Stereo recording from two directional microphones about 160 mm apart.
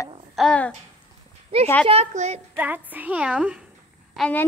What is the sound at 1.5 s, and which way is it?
Speech, 35° right (ahead or behind).